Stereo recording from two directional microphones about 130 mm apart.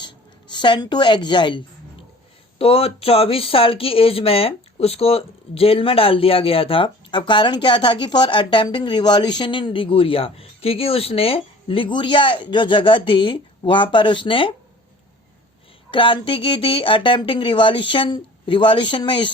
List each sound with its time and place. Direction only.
0.0 s speech: 35° left (ahead or behind)
15.9 s speech: 40° left (ahead or behind)